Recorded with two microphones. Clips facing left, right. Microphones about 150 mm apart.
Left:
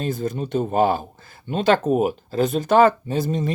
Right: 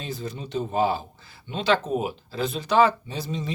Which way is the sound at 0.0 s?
50° left (ahead or behind).